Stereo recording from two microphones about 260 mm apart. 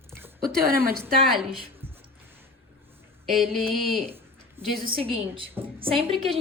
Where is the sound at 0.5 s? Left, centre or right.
Right.